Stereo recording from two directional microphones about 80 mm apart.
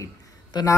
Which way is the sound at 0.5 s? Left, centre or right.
Left.